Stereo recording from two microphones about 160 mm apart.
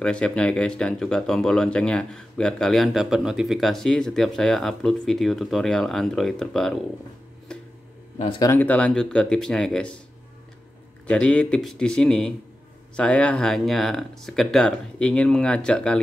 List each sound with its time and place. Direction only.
0.0 s speech: 5° left (ahead or behind)
8.4 s speech: 15° left (ahead or behind)
11.1 s speech: 5° left (ahead or behind)